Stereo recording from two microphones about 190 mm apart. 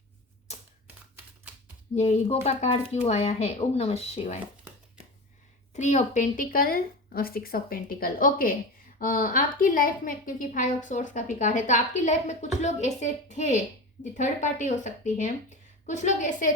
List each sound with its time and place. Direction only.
2.0 s a woman's voice: 35° left (ahead or behind)
5.7 s a woman's voice: 40° left (ahead or behind)